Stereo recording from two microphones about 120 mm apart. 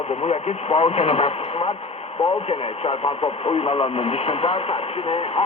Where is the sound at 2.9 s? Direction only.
45° left (ahead or behind).